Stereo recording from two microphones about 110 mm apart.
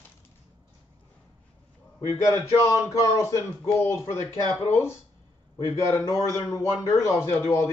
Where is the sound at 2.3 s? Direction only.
25° left (ahead or behind).